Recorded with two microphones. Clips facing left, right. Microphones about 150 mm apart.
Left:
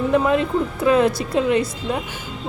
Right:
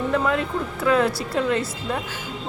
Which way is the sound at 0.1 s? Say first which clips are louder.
Left 6 dB; 20° left (ahead or behind).